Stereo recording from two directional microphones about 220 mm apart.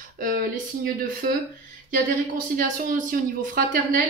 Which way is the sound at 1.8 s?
40° right (ahead or behind).